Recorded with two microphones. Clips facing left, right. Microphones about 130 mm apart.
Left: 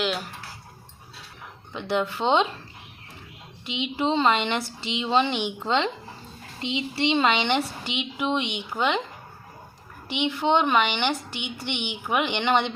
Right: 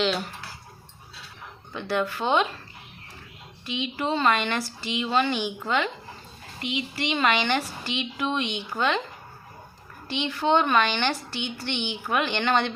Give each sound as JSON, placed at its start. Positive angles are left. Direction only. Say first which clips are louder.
{"t": 0.0, "sound": "speech", "louder": "right 2 dB", "side_deg": 5}
{"t": 1.7, "sound": "a woman's voice", "louder": "left 1 dB", "side_deg": 20}
{"t": 3.7, "sound": "a woman's voice", "louder": "left 2 dB", "side_deg": 20}
{"t": 10.1, "sound": "a woman's voice", "louder": "left 1 dB", "side_deg": 15}